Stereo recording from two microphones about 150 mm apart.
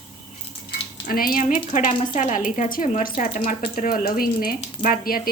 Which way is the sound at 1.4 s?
55° left (ahead or behind).